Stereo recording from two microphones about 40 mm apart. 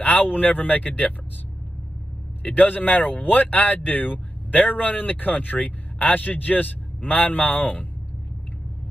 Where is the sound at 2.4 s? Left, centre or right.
Left.